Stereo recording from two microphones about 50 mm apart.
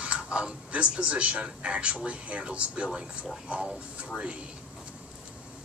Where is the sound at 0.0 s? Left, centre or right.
Right.